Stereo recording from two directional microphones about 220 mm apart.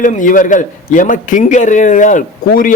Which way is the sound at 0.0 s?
35° left (ahead or behind).